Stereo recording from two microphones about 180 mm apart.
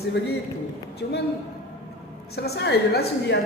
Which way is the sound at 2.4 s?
70° left (ahead or behind).